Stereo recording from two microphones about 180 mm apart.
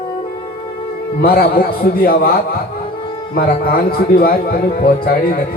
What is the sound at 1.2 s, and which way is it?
A man's voice, 55° left (ahead or behind).